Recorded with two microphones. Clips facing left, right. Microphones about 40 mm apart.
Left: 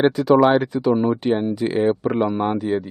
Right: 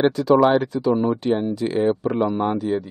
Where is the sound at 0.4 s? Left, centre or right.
Left.